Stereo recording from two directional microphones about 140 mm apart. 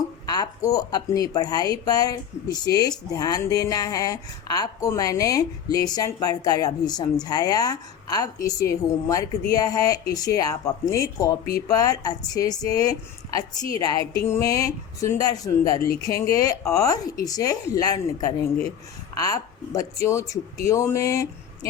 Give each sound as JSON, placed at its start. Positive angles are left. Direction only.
{"t": 0.3, "sound": "a woman's voice", "side_deg": 25}